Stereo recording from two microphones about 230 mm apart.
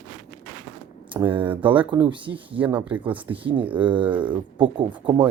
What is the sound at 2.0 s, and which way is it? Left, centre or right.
Speech, right.